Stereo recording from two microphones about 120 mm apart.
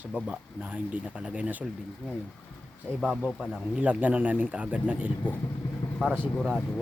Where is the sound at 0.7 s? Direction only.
10° right (ahead or behind).